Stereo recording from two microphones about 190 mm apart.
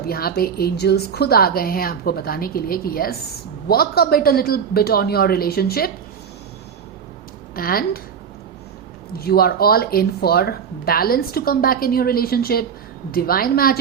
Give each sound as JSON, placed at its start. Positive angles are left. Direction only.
{"t": 0.0, "sound": "speech", "side_deg": 55}
{"t": 7.5, "sound": "a woman's voice", "side_deg": 50}
{"t": 9.1, "sound": "speech", "side_deg": 55}